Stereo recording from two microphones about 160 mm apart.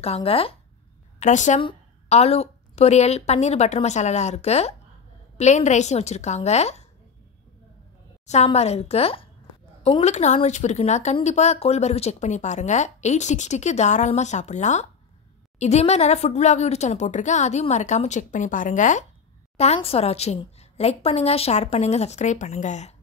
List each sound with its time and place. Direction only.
0.0 s a woman's voice: 40° left (ahead or behind)
1.2 s speech: 50° left (ahead or behind)
1.6 s speech: 35° left (ahead or behind)
8.3 s a woman's voice: 40° left (ahead or behind)